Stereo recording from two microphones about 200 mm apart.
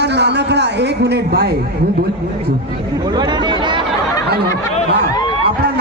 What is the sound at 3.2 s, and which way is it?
Speech, 25° right (ahead or behind).